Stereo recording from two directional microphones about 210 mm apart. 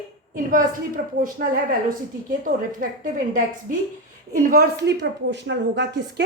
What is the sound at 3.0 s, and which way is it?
A woman's voice, 40° right (ahead or behind).